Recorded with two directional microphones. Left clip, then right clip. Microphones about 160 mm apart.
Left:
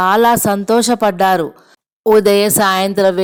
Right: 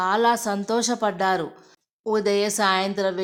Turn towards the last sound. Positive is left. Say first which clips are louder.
# left 10 dB
turn(degrees=40)  # may be behind; listen again after turning